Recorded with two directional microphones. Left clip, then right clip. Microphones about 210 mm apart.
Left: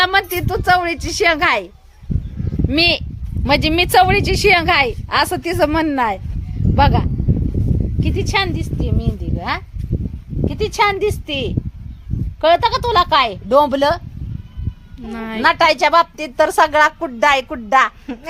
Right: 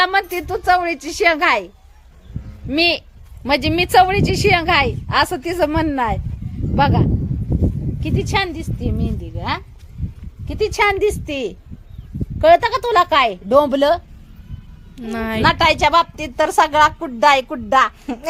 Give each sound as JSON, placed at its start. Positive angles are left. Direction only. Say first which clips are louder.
{"t": 0.0, "sound": "a woman's voice", "louder": "left 1 dB", "side_deg": 10}
{"t": 14.9, "sound": "a woman's voice", "louder": "right 4 dB", "side_deg": -50}
{"t": 15.4, "sound": "a woman's voice", "louder": "left 2 dB", "side_deg": 5}
{"t": 18.0, "sound": "speech", "louder": "right 3 dB", "side_deg": -40}